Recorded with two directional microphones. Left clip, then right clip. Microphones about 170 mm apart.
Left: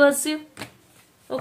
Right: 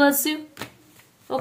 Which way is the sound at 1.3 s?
35° right (ahead or behind).